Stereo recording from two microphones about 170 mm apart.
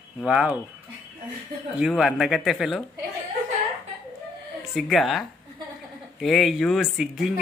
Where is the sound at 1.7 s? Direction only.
5° right (ahead or behind).